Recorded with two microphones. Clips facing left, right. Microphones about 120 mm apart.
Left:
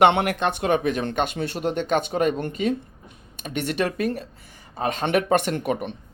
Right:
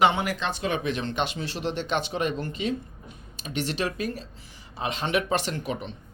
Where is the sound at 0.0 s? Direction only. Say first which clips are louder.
Left 5 dB; 65° left (ahead or behind).